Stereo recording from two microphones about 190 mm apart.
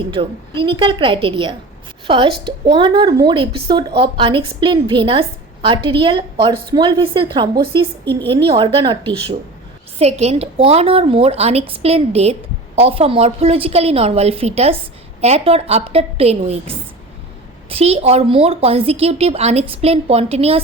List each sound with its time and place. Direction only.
0.0 s a woman's voice: 25° right (ahead or behind)
10.0 s a woman's voice: 35° right (ahead or behind)